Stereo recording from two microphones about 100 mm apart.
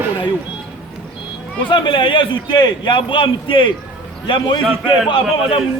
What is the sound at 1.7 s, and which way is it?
A man's voice, 55° left (ahead or behind).